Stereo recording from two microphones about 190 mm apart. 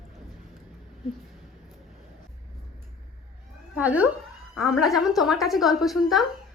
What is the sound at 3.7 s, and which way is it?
A woman's voice, 5° right (ahead or behind).